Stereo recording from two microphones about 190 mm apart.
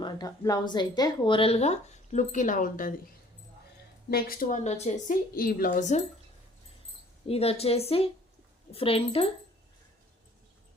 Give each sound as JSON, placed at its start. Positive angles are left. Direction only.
{"t": 0.0, "sound": "speech", "side_deg": 20}
{"t": 4.1, "sound": "speech", "side_deg": 50}
{"t": 5.3, "sound": "speech", "side_deg": 50}
{"t": 7.3, "sound": "speech", "side_deg": 30}